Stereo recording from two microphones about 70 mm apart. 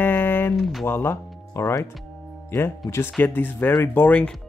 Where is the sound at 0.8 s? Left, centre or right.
Left.